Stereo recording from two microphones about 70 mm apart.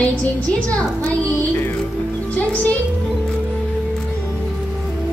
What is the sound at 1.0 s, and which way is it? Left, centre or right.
Music, left.